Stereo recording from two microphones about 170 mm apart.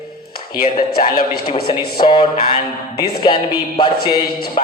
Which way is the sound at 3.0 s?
65° left (ahead or behind).